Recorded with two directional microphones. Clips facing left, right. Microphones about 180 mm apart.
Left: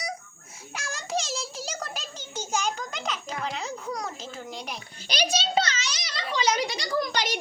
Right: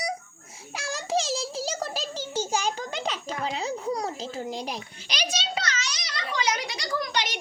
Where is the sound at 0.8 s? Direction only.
35° right (ahead or behind).